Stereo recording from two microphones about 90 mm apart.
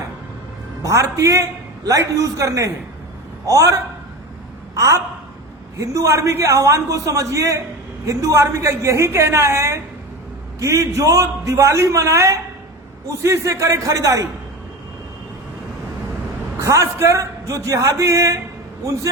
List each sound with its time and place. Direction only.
0.8 s a man's voice: 35° right (ahead or behind)
16.6 s a man's voice: 35° right (ahead or behind)